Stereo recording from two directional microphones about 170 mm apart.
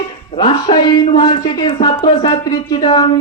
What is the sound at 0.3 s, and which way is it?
Speech, 25° left (ahead or behind).